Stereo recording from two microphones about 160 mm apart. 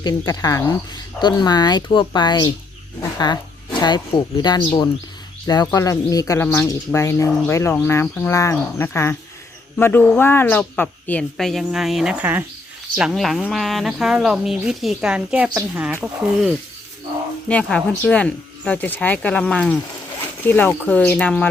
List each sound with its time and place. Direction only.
0.0 s speech: 25° left (ahead or behind)
3.8 s a woman's voice: 25° left (ahead or behind); by 21.5 s 10° left (ahead or behind)